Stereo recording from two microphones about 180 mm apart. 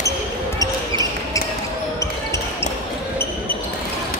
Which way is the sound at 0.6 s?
20° left (ahead or behind).